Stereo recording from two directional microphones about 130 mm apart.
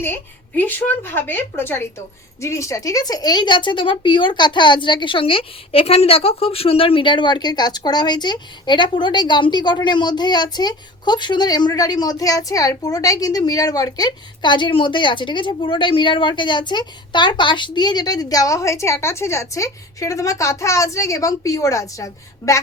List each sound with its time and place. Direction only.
0.0 s a woman's voice: 15° left (ahead or behind)